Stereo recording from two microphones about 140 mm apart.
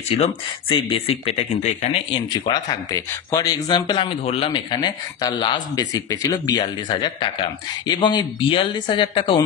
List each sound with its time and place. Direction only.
0.2 s speech: 45° left (ahead or behind)